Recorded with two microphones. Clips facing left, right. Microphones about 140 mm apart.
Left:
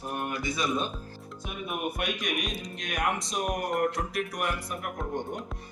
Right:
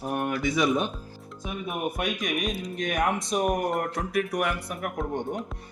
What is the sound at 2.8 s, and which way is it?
Speech, 55° right (ahead or behind).